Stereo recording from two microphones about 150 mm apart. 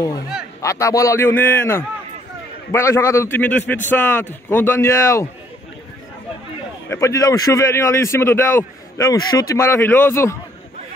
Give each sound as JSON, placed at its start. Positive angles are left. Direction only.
{"t": 0.6, "sound": "a man's voice", "side_deg": 20}
{"t": 6.9, "sound": "a man's voice", "side_deg": 20}